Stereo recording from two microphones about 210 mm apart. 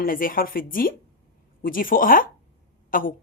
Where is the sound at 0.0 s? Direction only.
45° left (ahead or behind).